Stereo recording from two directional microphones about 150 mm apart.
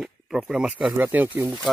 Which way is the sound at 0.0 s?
5° right (ahead or behind).